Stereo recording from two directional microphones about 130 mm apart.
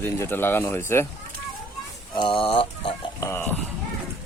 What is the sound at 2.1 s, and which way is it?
Speech, 40° left (ahead or behind).